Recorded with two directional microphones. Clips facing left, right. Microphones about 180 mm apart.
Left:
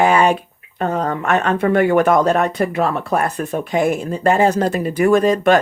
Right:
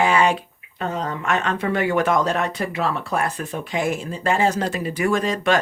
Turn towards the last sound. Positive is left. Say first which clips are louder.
# left 7 dB
turn(degrees=50)  # may be behind; listen again after turning